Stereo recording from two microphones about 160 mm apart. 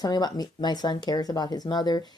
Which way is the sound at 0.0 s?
25° left (ahead or behind).